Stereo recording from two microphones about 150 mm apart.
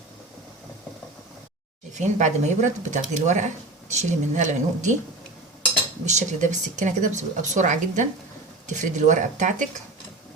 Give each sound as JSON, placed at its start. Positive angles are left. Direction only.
{"t": 1.9, "sound": "speech", "side_deg": -55}
{"t": 6.1, "sound": "speech", "side_deg": -50}